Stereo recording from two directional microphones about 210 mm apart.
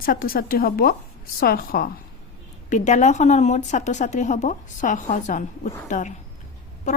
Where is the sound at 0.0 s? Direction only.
45° left (ahead or behind).